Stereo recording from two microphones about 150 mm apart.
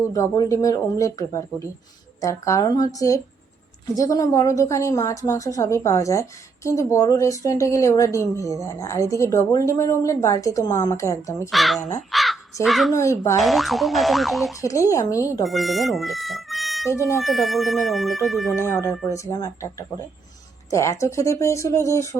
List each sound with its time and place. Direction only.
0.1 s a woman's voice: 20° left (ahead or behind)
11.5 s boing: centre (ahead or behind)
12.1 s crow: centre (ahead or behind)
12.6 s boing: centre (ahead or behind)
12.9 s a woman's voice: 20° left (ahead or behind)
13.4 s boing: centre (ahead or behind)
14.6 s a woman's voice: 20° left (ahead or behind)
15.4 s speech: centre (ahead or behind)
16.9 s a woman's voice: 20° left (ahead or behind)
17.2 s boing: centre (ahead or behind)
18.5 s a woman's voice: 20° left (ahead or behind)